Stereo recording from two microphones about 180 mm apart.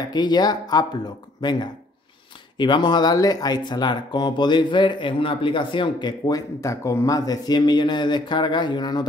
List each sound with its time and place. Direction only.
0.1 s speech: 25° left (ahead or behind)